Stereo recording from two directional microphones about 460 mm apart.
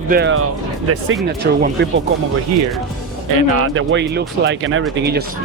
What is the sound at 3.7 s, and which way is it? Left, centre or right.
Speech, right.